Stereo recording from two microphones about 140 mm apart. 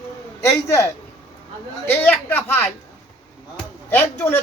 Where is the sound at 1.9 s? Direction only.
15° left (ahead or behind).